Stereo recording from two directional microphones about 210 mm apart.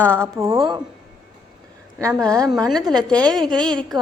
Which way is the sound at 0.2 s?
15° right (ahead or behind).